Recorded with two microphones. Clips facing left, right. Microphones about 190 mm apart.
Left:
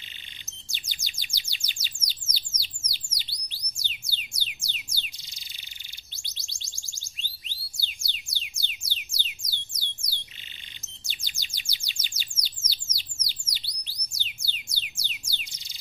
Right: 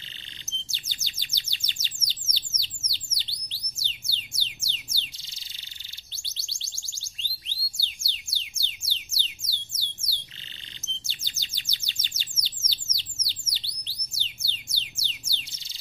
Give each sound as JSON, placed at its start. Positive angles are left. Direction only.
{"t": 0.5, "sound": "chirp", "side_deg": 15}
{"t": 4.2, "sound": "music", "side_deg": 15}
{"t": 6.2, "sound": "music", "side_deg": 15}
{"t": 11.1, "sound": "bird", "side_deg": 15}
{"t": 14.1, "sound": "music", "side_deg": 15}